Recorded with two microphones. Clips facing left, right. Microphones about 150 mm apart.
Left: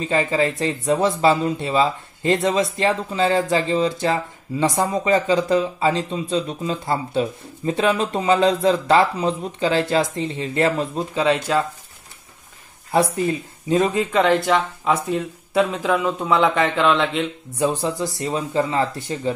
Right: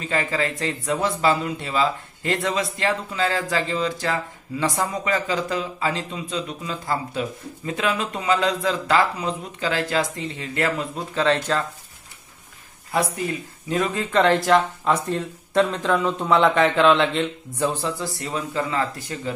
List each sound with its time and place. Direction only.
0.0 s speech: 20° left (ahead or behind)
11.1 s speech: 15° left (ahead or behind)
12.9 s speech: 25° left (ahead or behind)
14.1 s speech: centre (ahead or behind)
17.6 s speech: 20° left (ahead or behind)